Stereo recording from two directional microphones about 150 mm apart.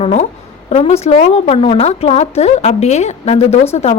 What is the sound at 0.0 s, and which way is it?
A woman's voice, 45° left (ahead or behind).